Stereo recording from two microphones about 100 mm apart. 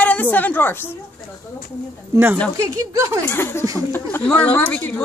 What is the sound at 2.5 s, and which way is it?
Speech, 35° right (ahead or behind).